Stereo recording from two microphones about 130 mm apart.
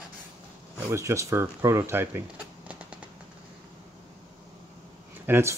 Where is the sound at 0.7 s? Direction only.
20° right (ahead or behind).